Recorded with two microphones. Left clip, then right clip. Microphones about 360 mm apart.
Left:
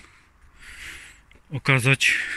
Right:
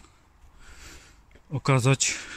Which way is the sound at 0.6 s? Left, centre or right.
Centre.